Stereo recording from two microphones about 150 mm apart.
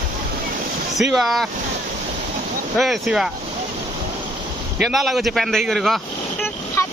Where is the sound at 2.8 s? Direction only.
Centre (ahead or behind).